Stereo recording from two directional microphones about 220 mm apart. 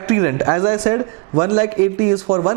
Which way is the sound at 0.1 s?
15° right (ahead or behind).